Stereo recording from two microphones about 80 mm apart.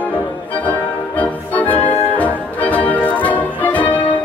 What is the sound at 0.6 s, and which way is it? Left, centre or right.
Organ, centre.